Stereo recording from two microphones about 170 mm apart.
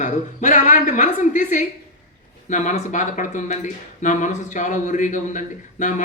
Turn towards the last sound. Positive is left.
turn(degrees=45)  # may be behind; listen again after turning